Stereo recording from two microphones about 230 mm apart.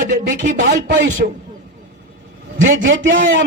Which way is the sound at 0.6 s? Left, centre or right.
Right.